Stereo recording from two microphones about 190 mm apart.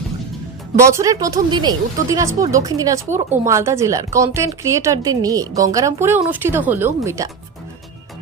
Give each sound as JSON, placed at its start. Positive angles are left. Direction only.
{"t": 0.8, "sound": "speech", "side_deg": -15}